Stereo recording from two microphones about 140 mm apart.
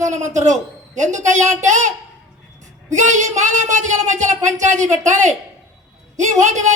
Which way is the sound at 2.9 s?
60° right (ahead or behind).